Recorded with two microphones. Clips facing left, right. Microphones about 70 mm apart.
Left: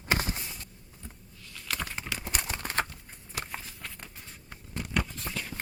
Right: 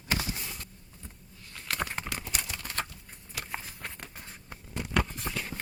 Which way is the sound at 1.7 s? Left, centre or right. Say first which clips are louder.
Right 4 dB; right.